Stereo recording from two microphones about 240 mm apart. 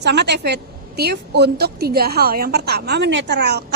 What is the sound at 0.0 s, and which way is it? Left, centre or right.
A woman's voice, right.